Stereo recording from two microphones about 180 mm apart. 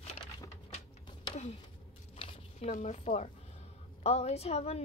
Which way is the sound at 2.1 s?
30° left (ahead or behind).